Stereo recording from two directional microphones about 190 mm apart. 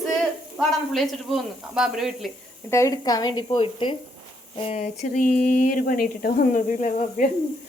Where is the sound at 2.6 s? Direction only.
15° left (ahead or behind); by 4.9 s 30° left (ahead or behind).